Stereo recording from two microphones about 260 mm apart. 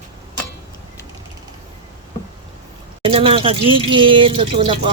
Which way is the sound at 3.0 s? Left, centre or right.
Right.